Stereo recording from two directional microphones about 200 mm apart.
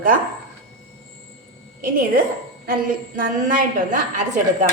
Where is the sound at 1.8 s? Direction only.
45° right (ahead or behind).